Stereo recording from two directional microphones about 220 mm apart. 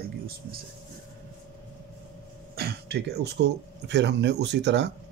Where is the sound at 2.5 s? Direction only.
45° right (ahead or behind).